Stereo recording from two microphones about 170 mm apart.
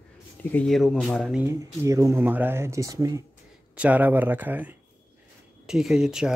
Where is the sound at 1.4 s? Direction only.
15° right (ahead or behind).